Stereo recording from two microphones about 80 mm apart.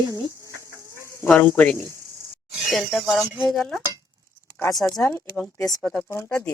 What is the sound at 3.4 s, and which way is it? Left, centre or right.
Cutlery, centre.